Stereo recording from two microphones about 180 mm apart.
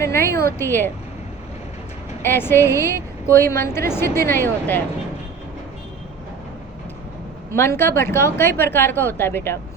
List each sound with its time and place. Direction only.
0.0 s a sound: 15° left (ahead or behind)
0.6 s a woman's voice: 10° left (ahead or behind)
2.2 s a woman's voice: 10° left (ahead or behind)
7.5 s a woman's voice: 15° left (ahead or behind)